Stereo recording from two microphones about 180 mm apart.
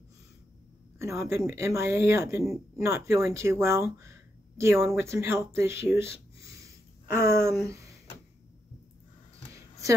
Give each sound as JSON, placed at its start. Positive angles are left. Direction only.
{"t": 0.9, "sound": "a woman's voice", "side_deg": -15}
{"t": 7.1, "sound": "speech", "side_deg": -15}
{"t": 7.6, "sound": "a sound", "side_deg": -20}